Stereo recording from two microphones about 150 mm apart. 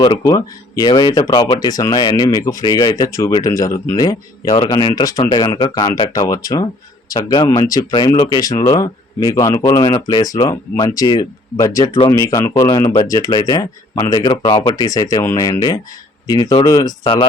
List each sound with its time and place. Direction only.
0.0 s speech: 25° left (ahead or behind)